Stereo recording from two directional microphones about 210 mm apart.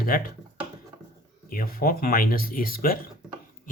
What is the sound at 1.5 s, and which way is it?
Speech, 45° left (ahead or behind).